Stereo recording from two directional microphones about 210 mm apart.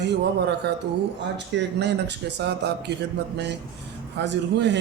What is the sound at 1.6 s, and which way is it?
A man's voice, 55° right (ahead or behind).